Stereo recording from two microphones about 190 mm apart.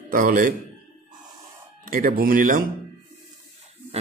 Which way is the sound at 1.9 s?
45° right (ahead or behind).